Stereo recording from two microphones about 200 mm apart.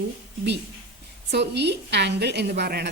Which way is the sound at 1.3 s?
60° right (ahead or behind).